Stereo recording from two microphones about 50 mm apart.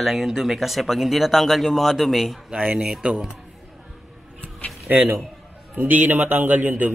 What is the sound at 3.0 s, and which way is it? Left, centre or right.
Speech, centre.